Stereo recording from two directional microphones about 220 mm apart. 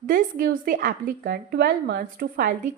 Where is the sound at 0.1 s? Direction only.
40° right (ahead or behind).